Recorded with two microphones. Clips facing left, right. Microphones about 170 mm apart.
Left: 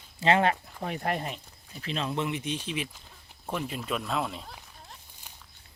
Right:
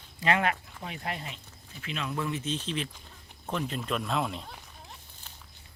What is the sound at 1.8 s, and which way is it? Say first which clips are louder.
Speech: left 3 dB; 35° left (ahead or behind).